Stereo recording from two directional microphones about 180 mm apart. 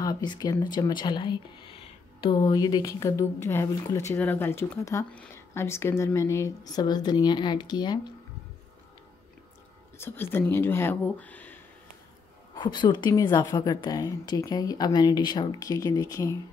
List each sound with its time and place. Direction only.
0.0 s a woman's voice: 25° left (ahead or behind)
9.9 s speech: 15° left (ahead or behind)
12.5 s a woman's voice: 25° left (ahead or behind)